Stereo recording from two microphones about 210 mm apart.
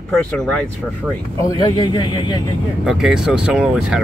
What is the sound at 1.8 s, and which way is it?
Speech, 25° left (ahead or behind).